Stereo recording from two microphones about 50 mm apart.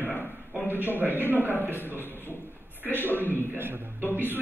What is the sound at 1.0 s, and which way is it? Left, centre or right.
A man's voice, right.